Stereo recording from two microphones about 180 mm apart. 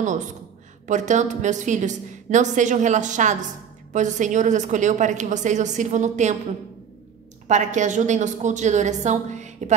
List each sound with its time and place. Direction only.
0.8 s a woman's voice: 40° right (ahead or behind)
7.4 s a woman's voice: 40° right (ahead or behind)